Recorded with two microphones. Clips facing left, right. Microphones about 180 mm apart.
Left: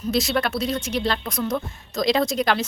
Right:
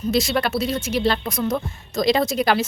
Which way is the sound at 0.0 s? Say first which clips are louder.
Right 2 dB; centre (ahead or behind).